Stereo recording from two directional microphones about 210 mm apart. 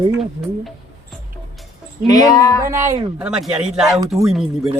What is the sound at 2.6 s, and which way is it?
A man's voice, 10° right (ahead or behind).